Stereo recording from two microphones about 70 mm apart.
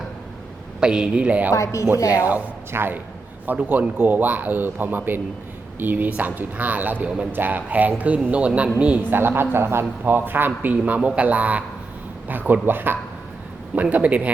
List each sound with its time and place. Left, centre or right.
0.8 s a woman's voice: centre
1.5 s speech: left
2.1 s speech: right
9.0 s speech: right
13.9 s speech: centre